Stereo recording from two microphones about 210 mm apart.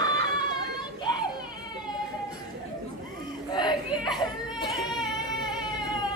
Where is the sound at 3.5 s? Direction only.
20° left (ahead or behind).